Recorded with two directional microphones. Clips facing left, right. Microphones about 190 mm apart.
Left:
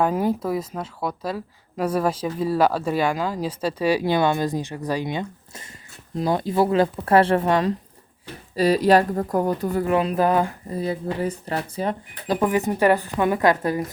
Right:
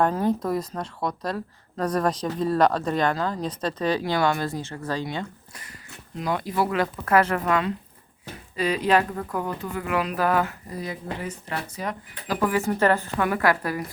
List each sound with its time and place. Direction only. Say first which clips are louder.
0.0 s speech: left 1 dB; 10° left (ahead or behind)
6.1 s speech: left 5 dB; 35° left (ahead or behind)